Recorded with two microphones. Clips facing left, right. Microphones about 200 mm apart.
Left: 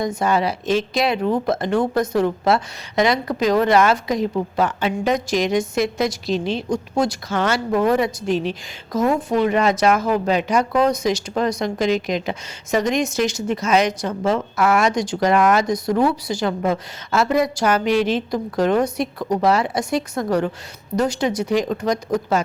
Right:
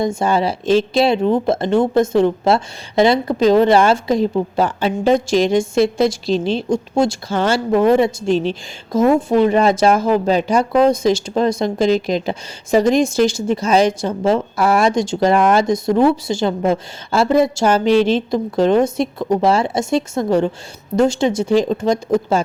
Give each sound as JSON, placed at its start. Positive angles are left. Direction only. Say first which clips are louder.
{"t": 0.0, "sound": "speech", "louder": "right 3 dB", "side_deg": -25}